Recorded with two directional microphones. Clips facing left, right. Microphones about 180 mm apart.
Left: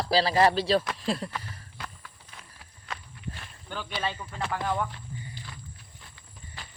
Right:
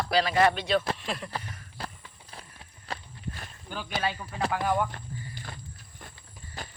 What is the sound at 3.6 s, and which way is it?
Speech, 10° right (ahead or behind).